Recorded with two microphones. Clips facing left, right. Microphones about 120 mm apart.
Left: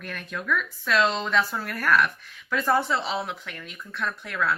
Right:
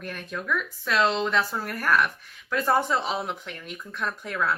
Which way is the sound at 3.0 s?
45° right (ahead or behind).